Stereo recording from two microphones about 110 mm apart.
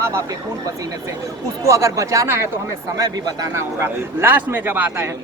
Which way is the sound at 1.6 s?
30° right (ahead or behind).